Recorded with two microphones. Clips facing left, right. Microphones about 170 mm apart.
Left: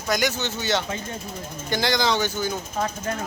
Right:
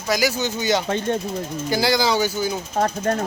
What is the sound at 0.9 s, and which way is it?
Speech, 70° right (ahead or behind).